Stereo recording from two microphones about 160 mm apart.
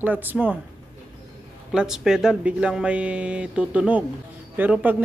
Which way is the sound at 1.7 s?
5° right (ahead or behind).